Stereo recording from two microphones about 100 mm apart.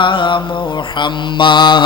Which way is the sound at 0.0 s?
55° left (ahead or behind).